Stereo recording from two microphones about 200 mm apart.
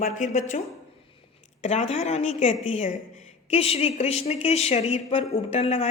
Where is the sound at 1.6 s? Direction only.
35° left (ahead or behind).